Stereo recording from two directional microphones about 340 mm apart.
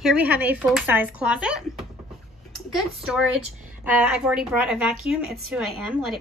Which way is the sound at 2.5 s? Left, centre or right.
Centre.